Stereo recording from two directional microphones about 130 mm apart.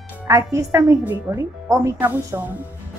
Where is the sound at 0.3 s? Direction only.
25° right (ahead or behind).